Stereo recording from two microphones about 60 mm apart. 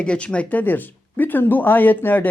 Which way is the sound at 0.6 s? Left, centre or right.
Left.